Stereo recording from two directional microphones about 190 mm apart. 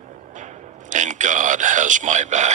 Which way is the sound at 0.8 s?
40° right (ahead or behind).